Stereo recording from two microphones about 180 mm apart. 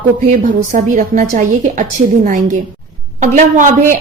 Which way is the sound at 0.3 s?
45° right (ahead or behind).